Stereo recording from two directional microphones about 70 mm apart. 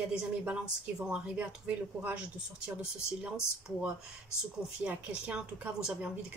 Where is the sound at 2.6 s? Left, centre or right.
Centre.